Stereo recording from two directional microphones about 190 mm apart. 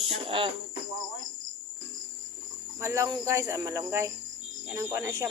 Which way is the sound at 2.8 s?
15° right (ahead or behind).